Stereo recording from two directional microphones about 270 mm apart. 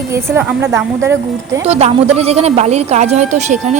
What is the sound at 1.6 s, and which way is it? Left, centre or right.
Speech, right.